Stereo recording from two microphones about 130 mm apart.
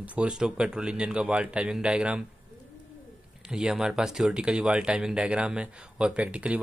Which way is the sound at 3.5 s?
5° right (ahead or behind).